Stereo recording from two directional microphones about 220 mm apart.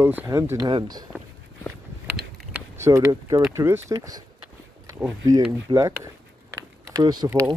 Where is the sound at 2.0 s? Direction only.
5° right (ahead or behind).